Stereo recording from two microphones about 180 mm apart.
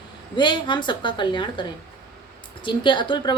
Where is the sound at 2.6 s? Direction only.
25° left (ahead or behind).